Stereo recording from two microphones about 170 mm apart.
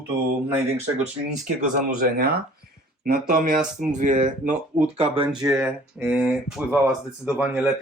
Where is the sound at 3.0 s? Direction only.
55° right (ahead or behind); by 5.3 s 35° right (ahead or behind).